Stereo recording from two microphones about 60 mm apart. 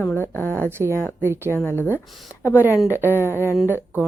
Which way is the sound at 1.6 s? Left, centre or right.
Left.